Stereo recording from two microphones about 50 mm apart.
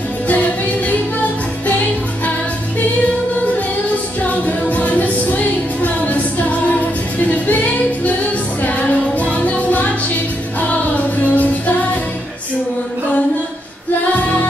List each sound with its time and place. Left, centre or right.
0.3 s music: left
4.2 s music: left
9.2 s music: left
11.2 s music: left
14.1 s music: left